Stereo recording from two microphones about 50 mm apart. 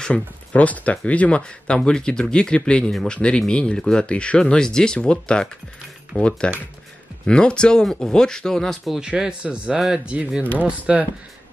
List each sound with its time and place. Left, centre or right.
0.1 s speech: left; by 8.9 s centre
8.9 s speech: centre
9.9 s speech: right